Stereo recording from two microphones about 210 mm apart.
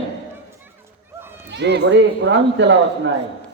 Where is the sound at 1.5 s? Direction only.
55° right (ahead or behind).